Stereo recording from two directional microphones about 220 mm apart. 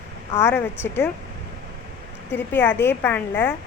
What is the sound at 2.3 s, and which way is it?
Speech, 10° left (ahead or behind).